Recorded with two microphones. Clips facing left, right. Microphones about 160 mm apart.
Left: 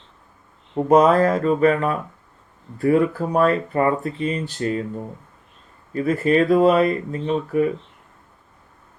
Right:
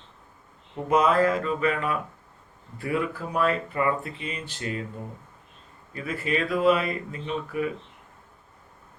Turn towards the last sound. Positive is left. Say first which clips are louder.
# left 8 dB
turn(degrees=40)  # may be behind; listen again after turning